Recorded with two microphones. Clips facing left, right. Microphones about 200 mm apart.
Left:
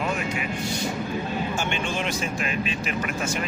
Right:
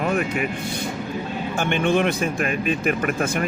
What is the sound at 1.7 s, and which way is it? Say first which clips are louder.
Speech: right 8 dB; 55° right (ahead or behind).